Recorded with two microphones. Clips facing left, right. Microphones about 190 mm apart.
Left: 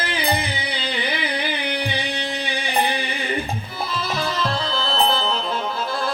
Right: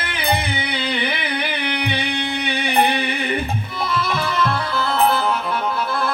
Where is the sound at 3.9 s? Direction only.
60° right (ahead or behind).